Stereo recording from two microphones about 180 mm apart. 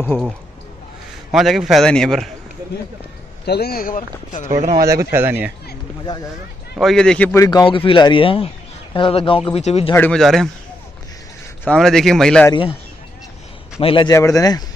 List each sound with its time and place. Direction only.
1.3 s a man's voice: centre (ahead or behind)
3.4 s speech: 60° left (ahead or behind); by 4.5 s 45° left (ahead or behind)
4.5 s speech: 45° right (ahead or behind)
4.8 s speech: 15° right (ahead or behind)
6.8 s a man's voice: 5° left (ahead or behind); by 9.9 s 35° left (ahead or behind)
9.9 s a man's voice: 5° left (ahead or behind)
11.6 s a man's voice: 5° left (ahead or behind)
13.7 s a man's voice: 30° left (ahead or behind)
14.1 s a man's voice: 20° left (ahead or behind)